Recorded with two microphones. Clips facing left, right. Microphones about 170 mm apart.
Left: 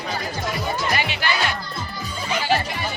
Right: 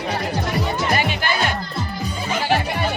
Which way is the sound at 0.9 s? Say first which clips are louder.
Right 3 dB; 45° right (ahead or behind).